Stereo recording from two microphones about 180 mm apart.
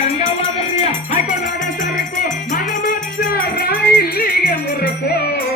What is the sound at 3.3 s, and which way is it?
Music, 55° left (ahead or behind).